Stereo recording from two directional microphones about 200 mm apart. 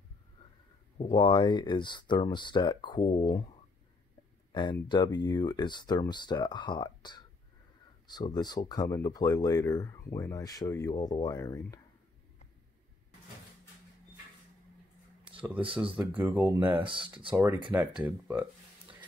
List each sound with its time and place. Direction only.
0.9 s speech: 25° left (ahead or behind)
4.5 s a sound: 20° left (ahead or behind)
4.8 s speech: 20° left (ahead or behind)
15.3 s a sound: 5° right (ahead or behind)
16.0 s speech: 10° right (ahead or behind)
16.8 s speech: 25° right (ahead or behind)
17.7 s speech: 10° right (ahead or behind)